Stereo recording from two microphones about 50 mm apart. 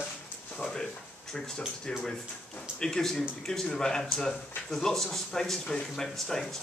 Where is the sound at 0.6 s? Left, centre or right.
Centre.